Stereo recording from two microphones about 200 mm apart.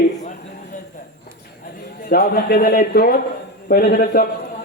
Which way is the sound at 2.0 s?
50° left (ahead or behind).